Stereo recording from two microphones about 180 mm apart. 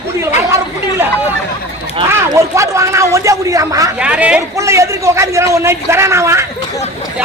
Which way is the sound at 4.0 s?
5° right (ahead or behind).